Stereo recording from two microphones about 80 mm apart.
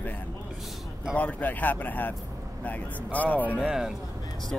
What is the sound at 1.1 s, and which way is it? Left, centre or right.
A man's voice, centre.